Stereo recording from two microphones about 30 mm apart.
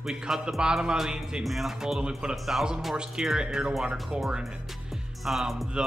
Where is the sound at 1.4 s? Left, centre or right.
Centre.